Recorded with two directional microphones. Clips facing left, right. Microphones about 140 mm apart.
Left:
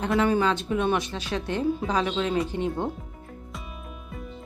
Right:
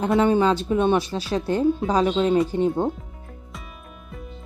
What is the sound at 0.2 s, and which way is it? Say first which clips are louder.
Speech: right 4 dB; 30° right (ahead or behind).